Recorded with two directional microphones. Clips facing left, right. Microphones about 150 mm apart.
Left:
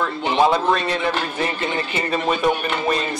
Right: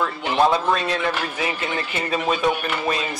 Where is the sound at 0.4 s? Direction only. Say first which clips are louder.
Left 1 dB; centre (ahead or behind).